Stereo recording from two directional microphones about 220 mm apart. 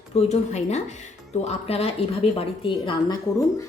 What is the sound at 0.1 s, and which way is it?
A woman's voice, 30° left (ahead or behind).